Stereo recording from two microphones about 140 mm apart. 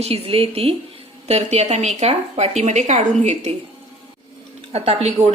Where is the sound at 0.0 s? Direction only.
40° right (ahead or behind).